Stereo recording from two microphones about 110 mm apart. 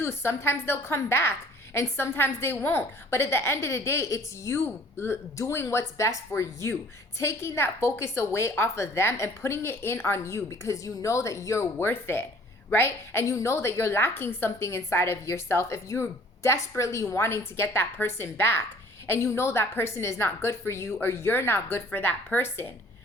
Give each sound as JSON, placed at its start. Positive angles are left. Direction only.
{"t": 0.0, "sound": "a woman's voice", "side_deg": 25}